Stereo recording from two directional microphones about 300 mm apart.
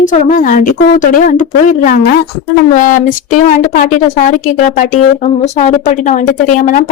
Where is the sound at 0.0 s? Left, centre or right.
Left.